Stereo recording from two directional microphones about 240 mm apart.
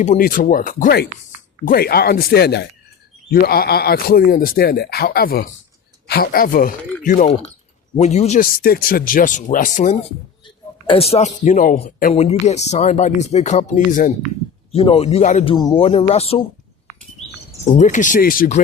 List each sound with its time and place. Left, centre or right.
0.0 s speech: left
17.7 s speech: left